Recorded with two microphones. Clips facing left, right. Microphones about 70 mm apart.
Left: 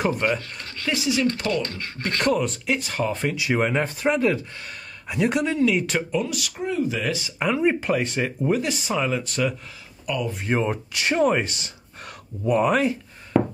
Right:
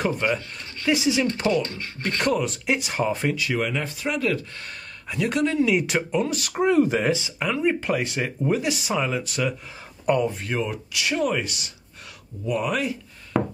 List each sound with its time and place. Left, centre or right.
0.2 s speech: centre
0.8 s speech: centre
2.6 s speech: centre
3.3 s speech: left
5.0 s speech: centre
5.6 s speech: centre
6.2 s speech: right
6.6 s speech: right
7.0 s speech: right
7.3 s speech: centre
7.8 s speech: centre
10.0 s speech: right
10.4 s speech: left